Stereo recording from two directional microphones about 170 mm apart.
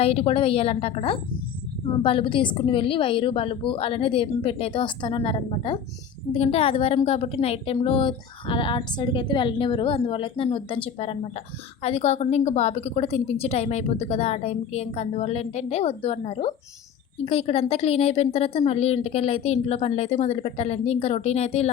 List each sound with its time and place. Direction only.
0.0 s a woman's voice: 35° left (ahead or behind)